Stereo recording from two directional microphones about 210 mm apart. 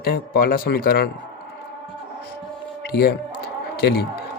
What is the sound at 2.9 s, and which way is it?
A man's voice, 50° left (ahead or behind).